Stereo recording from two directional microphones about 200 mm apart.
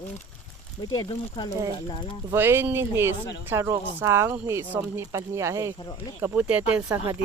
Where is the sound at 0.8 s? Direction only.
25° left (ahead or behind).